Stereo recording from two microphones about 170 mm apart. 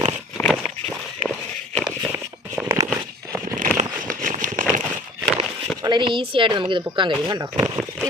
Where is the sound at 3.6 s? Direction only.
50° right (ahead or behind).